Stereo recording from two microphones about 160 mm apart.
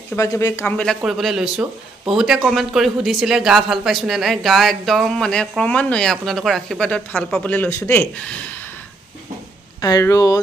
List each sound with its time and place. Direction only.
0.1 s speech: 20° left (ahead or behind)
0.7 s speech: centre (ahead or behind)
9.8 s speech: 20° left (ahead or behind)